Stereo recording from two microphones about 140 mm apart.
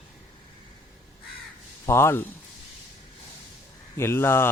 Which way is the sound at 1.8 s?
15° left (ahead or behind).